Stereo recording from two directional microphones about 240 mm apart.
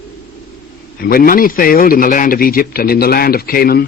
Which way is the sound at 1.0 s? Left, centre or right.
Left.